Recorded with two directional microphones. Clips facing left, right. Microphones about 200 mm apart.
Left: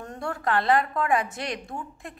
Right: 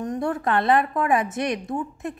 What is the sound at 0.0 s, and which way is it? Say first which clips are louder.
A woman's voice: right 6 dB; 20° right (ahead or behind).